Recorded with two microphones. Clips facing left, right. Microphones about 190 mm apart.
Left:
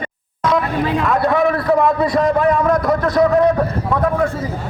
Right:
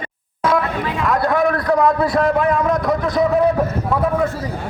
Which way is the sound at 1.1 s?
Centre (ahead or behind).